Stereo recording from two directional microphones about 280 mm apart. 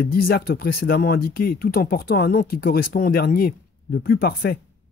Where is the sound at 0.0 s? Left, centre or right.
Left.